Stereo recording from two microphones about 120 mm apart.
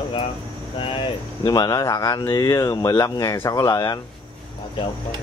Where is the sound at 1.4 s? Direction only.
35° left (ahead or behind).